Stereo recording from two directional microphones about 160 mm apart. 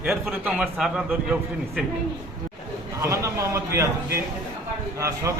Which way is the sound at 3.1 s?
20° right (ahead or behind).